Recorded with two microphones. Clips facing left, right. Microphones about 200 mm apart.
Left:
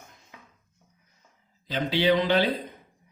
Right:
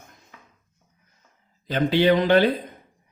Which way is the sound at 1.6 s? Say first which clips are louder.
Right 5 dB; 50° right (ahead or behind).